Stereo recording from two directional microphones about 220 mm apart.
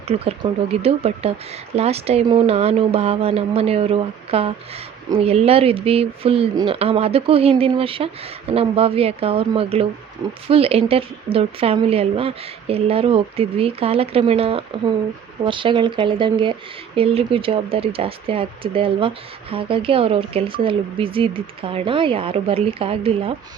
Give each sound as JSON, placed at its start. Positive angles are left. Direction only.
{"t": 0.1, "sound": "speech", "side_deg": -25}